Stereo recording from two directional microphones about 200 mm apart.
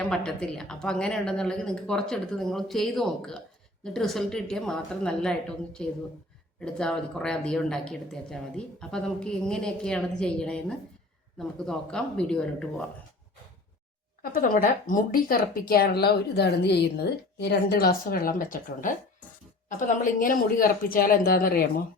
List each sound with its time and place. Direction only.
0.0 s speech: 5° left (ahead or behind)
14.2 s speech: 45° left (ahead or behind)